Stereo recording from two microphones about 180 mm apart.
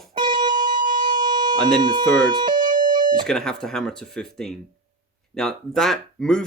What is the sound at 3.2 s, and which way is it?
Speech, 5° left (ahead or behind).